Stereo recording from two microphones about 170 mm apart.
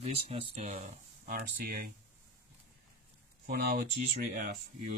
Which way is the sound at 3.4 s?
60° right (ahead or behind).